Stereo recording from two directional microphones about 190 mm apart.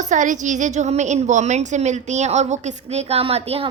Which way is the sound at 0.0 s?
40° right (ahead or behind).